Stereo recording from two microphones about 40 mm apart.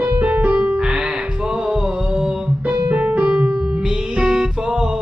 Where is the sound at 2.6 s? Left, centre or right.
Right.